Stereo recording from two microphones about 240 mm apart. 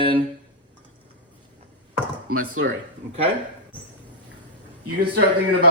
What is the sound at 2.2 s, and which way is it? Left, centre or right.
Speech, right.